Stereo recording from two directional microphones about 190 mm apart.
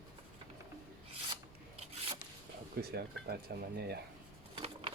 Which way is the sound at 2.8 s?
55° right (ahead or behind).